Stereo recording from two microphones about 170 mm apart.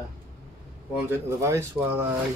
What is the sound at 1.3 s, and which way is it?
Speech, 15° right (ahead or behind).